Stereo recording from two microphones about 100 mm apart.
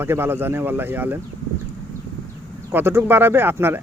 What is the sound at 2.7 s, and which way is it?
Speech, 25° right (ahead or behind).